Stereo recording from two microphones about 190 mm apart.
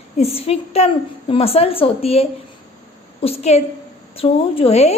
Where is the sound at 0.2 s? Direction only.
30° left (ahead or behind).